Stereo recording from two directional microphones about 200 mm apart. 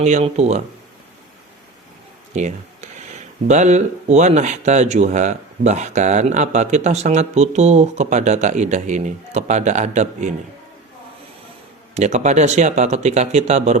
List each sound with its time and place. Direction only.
0.0 s speech: 35° right (ahead or behind)
2.3 s a sound: 35° right (ahead or behind)
3.4 s speech: 35° right (ahead or behind)
11.9 s speech: 35° right (ahead or behind)